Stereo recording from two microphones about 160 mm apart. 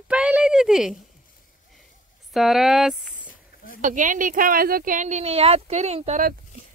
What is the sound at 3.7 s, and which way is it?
Speech, 55° right (ahead or behind).